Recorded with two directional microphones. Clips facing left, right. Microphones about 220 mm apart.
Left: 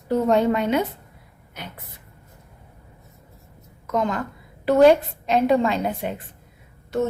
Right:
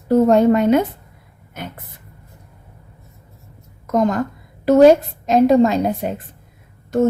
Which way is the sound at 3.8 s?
45° right (ahead or behind).